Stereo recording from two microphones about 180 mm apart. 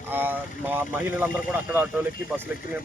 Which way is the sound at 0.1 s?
10° right (ahead or behind).